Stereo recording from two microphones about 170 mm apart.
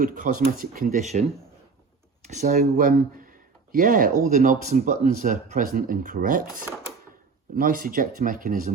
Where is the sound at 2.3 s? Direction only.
45° right (ahead or behind).